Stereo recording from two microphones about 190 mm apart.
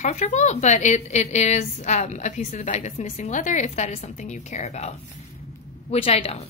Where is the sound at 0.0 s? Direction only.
35° left (ahead or behind).